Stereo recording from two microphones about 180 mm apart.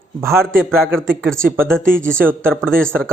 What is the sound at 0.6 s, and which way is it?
Speech, centre (ahead or behind).